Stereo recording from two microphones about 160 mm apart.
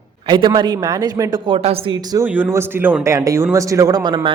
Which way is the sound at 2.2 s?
10° right (ahead or behind).